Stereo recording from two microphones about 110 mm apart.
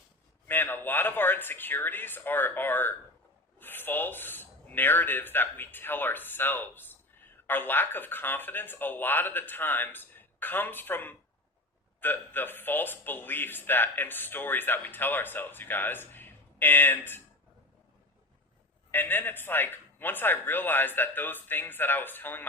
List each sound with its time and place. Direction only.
0.4 s a man's voice: 20° left (ahead or behind)
18.9 s a man's voice: 20° left (ahead or behind)